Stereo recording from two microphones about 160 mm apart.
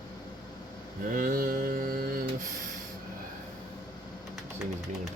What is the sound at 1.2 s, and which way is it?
Mantra, 60° right (ahead or behind).